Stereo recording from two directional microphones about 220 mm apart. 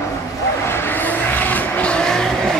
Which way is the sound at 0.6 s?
10° left (ahead or behind).